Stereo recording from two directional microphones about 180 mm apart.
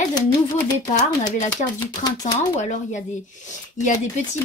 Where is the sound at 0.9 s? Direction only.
40° left (ahead or behind).